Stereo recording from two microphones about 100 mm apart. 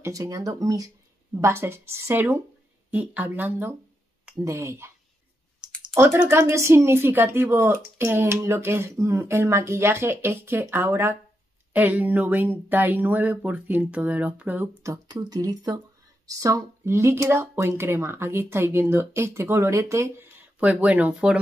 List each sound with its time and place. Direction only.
0.0 s speech: 35° right (ahead or behind)
1.3 s speech: 25° right (ahead or behind)
5.9 s speech: 25° right (ahead or behind)
14.8 s speech: 35° right (ahead or behind)
20.5 s speech: 15° right (ahead or behind)